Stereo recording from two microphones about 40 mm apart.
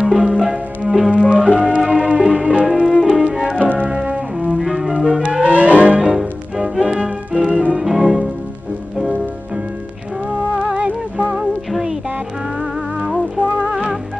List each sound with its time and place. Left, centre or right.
0.0 s music: centre
1.3 s music: right
3.6 s music: right
3.9 s music: right
4.6 s music: centre
5.4 s music: right
6.1 s music: centre
7.0 s music: right
7.7 s music: centre
10.8 s music: right